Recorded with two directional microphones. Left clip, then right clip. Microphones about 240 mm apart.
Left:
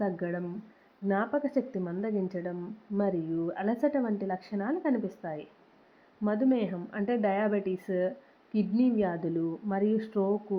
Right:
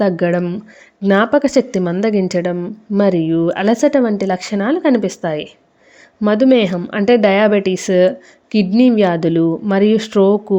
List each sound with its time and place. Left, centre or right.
0.0 s speech: right